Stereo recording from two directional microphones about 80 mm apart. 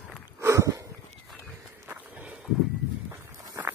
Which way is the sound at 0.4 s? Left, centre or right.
Right.